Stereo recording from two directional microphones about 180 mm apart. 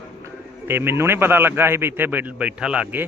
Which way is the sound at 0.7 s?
15° right (ahead or behind).